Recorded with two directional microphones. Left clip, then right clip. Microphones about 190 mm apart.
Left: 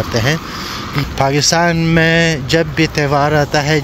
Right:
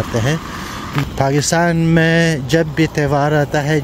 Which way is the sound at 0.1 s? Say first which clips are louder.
Left 3 dB; 20° right (ahead or behind).